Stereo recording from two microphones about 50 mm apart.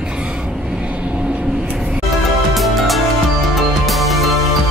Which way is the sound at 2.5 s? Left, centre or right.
Centre.